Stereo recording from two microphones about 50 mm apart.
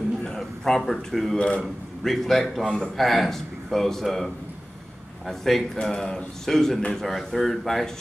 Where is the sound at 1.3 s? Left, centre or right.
Left.